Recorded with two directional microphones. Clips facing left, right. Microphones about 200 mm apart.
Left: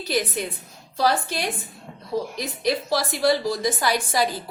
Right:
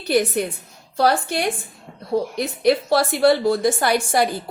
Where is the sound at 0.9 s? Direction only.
60° right (ahead or behind).